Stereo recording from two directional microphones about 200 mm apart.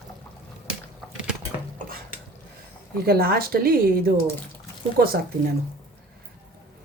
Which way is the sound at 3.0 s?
50° right (ahead or behind).